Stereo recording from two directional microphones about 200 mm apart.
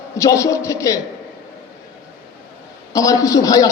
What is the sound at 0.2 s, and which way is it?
Speech, 15° left (ahead or behind).